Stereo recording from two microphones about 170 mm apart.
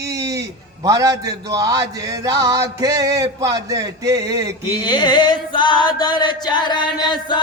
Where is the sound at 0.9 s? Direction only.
20° right (ahead or behind).